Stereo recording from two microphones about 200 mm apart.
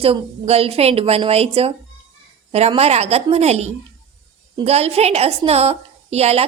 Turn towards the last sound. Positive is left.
turn(degrees=-30)  # may be behind; listen again after turning